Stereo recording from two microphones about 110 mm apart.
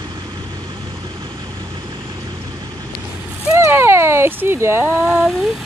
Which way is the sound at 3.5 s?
25° right (ahead or behind).